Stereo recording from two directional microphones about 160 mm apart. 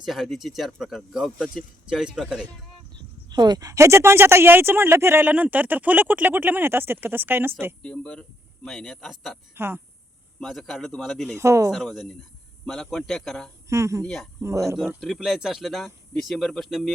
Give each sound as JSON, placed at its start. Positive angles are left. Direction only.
{"t": 0.0, "sound": "speech", "side_deg": 0}
{"t": 3.2, "sound": "speech", "side_deg": -25}
{"t": 7.8, "sound": "speech", "side_deg": 5}
{"t": 9.6, "sound": "speech", "side_deg": -15}
{"t": 10.4, "sound": "speech", "side_deg": 0}
{"t": 11.3, "sound": "speech", "side_deg": -20}
{"t": 11.7, "sound": "speech", "side_deg": 0}
{"t": 13.7, "sound": "speech", "side_deg": -20}
{"t": 15.0, "sound": "speech", "side_deg": 0}